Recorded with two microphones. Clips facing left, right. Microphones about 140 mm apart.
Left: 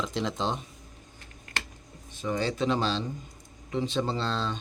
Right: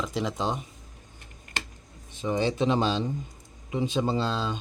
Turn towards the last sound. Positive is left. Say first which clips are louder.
# right 3 dB
turn(degrees=-10)  # may be behind; listen again after turning